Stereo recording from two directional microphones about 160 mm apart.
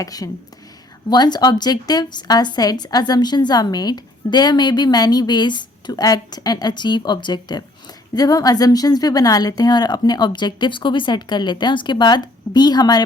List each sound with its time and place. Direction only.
0.0 s speech: 20° left (ahead or behind)